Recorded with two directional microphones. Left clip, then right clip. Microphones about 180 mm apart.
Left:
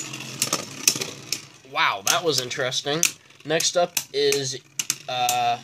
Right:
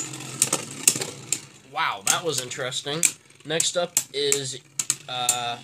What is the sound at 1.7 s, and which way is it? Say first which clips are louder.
Speech: left 3 dB; 40° left (ahead or behind).